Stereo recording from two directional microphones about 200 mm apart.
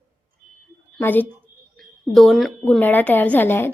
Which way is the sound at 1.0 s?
10° left (ahead or behind).